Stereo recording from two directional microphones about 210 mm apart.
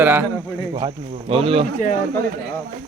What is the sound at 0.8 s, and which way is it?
Speech, 25° right (ahead or behind).